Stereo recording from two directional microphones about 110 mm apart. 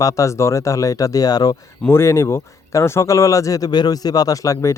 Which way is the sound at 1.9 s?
25° left (ahead or behind).